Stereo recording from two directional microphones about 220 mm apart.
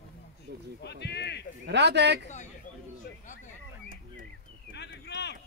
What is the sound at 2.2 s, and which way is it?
Speech, 35° left (ahead or behind).